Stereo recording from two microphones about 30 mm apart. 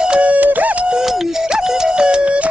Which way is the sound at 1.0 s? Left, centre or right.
Right.